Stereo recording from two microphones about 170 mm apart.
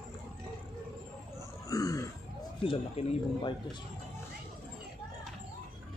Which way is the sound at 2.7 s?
35° left (ahead or behind).